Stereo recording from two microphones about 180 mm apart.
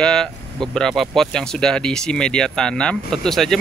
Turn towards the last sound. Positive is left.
turn(degrees=0)  # may be behind; listen again after turning